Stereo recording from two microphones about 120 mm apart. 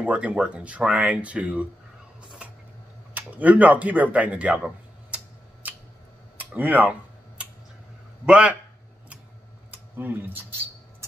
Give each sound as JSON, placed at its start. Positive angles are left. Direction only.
{"t": 0.0, "sound": "speech", "side_deg": -10}
{"t": 3.2, "sound": "speech", "side_deg": -15}
{"t": 6.3, "sound": "typing", "side_deg": -15}
{"t": 8.3, "sound": "speech", "side_deg": -10}
{"t": 9.9, "sound": "speech", "side_deg": -15}